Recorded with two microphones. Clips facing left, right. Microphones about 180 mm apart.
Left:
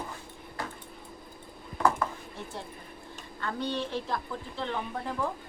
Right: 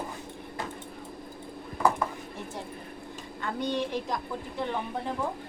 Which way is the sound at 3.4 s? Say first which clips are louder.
Right 2 dB; 15° right (ahead or behind).